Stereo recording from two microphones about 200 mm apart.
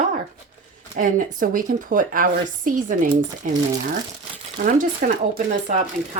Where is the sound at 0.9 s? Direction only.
45° right (ahead or behind).